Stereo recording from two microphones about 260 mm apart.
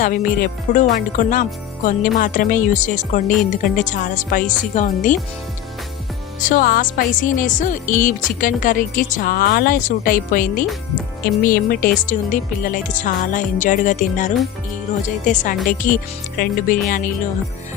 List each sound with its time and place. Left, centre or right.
0.0 s speech: left
6.4 s speech: left